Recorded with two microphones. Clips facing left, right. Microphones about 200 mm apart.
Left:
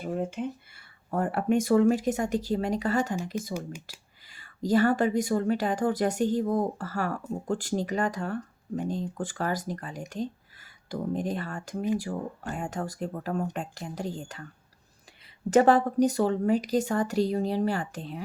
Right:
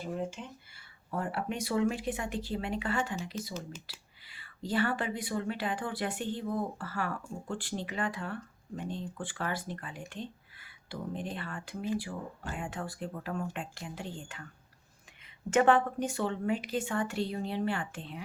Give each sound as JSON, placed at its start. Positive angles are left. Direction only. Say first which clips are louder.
{"t": 0.0, "sound": "speech", "louder": "left 6 dB", "side_deg": 55}
{"t": 15.4, "sound": "speech", "louder": "left 5 dB", "side_deg": 35}